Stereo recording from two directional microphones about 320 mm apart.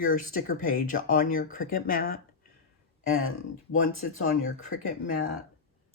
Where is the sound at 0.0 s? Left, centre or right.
Left.